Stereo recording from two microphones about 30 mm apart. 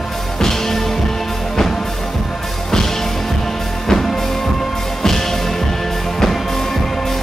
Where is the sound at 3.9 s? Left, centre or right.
Centre.